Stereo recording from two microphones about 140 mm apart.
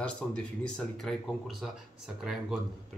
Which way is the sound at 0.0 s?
5° left (ahead or behind).